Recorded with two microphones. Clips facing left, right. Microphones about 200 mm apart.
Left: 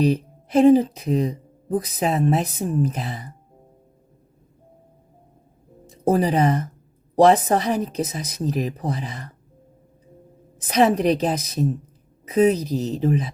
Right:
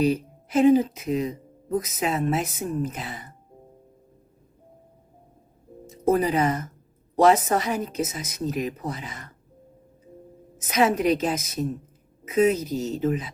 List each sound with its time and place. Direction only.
0.0 s speech: 35° left (ahead or behind)
6.1 s speech: 35° left (ahead or behind)
10.6 s speech: 35° left (ahead or behind)